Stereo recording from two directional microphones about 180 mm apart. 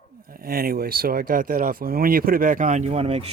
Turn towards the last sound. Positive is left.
turn(degrees=-35)  # may be behind; listen again after turning